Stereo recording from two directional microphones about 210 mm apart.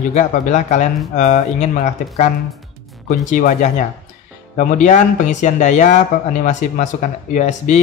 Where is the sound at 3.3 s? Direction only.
35° left (ahead or behind).